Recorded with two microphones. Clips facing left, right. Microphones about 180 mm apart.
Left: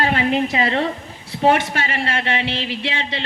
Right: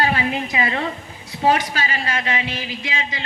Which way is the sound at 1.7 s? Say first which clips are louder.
Left 2 dB; 65° left (ahead or behind).